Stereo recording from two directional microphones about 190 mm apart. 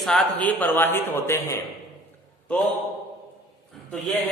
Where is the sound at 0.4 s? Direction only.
10° left (ahead or behind).